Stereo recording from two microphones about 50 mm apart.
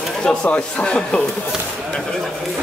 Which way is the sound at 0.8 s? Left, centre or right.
Centre.